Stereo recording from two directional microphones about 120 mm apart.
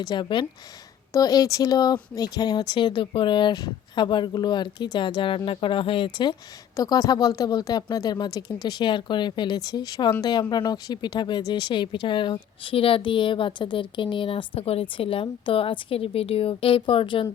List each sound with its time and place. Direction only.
0.0 s speech: 40° left (ahead or behind)
6.7 s speech: 30° left (ahead or behind); by 17.2 s 45° left (ahead or behind)